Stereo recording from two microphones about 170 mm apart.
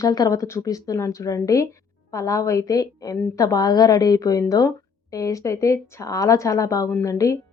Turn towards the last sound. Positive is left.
turn(degrees=20)  # may be behind; listen again after turning